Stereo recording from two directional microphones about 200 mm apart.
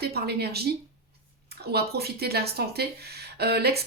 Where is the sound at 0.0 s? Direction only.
55° right (ahead or behind).